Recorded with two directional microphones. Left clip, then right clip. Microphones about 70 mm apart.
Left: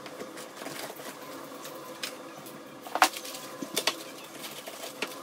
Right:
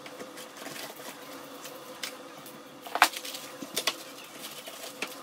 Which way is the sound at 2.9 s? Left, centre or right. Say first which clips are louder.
Even; right.